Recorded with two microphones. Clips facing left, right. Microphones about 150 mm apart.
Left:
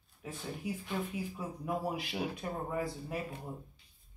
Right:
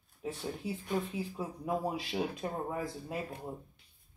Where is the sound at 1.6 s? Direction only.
25° right (ahead or behind).